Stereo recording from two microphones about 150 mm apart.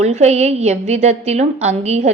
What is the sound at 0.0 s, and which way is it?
Speech, 45° right (ahead or behind).